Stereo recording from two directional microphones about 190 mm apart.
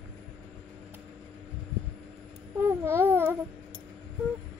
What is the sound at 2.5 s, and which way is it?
Babbling, 15° right (ahead or behind).